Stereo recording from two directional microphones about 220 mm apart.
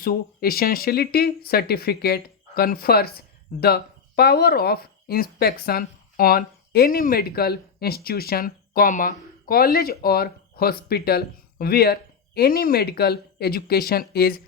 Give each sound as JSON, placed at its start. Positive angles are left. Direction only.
{"t": 0.0, "sound": "speech", "side_deg": 40}